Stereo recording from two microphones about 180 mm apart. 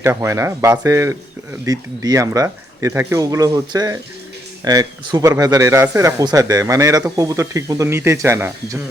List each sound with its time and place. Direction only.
0.0 s speech: 15° right (ahead or behind)